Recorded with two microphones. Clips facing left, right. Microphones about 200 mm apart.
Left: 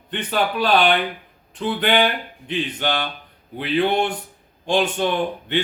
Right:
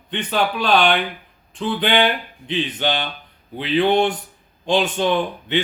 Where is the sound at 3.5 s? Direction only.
10° left (ahead or behind).